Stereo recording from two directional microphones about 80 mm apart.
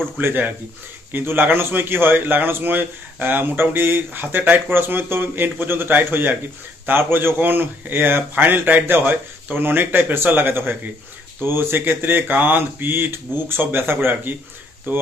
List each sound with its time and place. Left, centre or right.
0.2 s a man's voice: right